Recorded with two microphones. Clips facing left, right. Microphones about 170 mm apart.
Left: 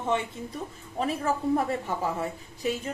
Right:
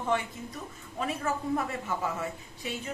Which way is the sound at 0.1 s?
20° left (ahead or behind).